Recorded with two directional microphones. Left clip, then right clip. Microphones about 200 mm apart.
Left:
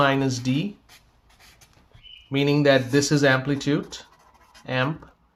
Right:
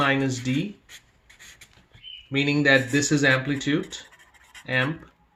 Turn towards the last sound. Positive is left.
turn(degrees=35)  # may be behind; listen again after turning